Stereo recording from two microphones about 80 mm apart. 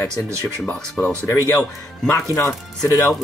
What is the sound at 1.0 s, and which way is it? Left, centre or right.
Speech, left.